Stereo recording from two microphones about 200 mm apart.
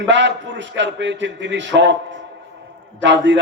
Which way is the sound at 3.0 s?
65° right (ahead or behind).